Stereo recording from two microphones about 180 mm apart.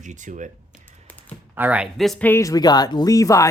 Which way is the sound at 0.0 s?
45° right (ahead or behind).